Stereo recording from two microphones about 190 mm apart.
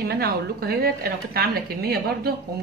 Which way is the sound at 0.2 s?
55° right (ahead or behind).